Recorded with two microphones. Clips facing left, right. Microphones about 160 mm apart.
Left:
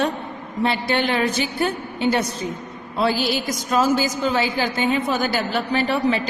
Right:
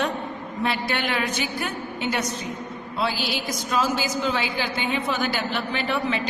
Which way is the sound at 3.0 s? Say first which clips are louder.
Left 6 dB; 45° left (ahead or behind).